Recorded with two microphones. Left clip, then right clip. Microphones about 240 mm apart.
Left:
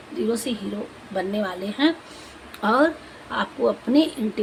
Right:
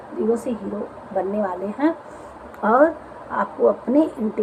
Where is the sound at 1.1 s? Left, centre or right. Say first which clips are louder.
Right 3 dB; left.